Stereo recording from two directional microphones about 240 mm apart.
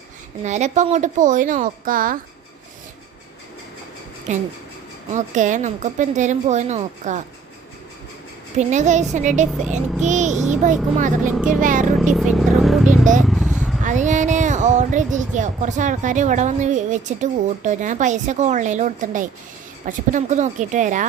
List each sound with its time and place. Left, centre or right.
0.4 s speech: right
4.3 s a child's voice: right
8.5 s a child's voice: right
11.3 s speech: centre
11.6 s speech: right
12.1 s vehicle: centre
13.8 s speech: right